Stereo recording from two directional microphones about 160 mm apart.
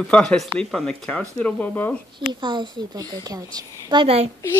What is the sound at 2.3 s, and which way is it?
A woman's voice, 30° right (ahead or behind).